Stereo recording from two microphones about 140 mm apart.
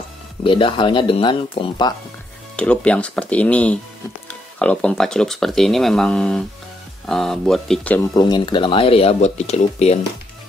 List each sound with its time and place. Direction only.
0.4 s speech: 35° left (ahead or behind)
2.5 s speech: 10° left (ahead or behind)
8.1 s speech: 30° left (ahead or behind); by 9.9 s 50° left (ahead or behind)